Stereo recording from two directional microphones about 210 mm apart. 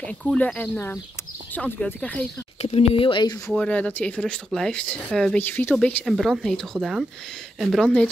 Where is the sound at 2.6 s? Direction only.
30° left (ahead or behind).